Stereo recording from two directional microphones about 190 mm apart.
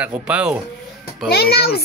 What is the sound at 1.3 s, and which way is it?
Speech, 55° left (ahead or behind).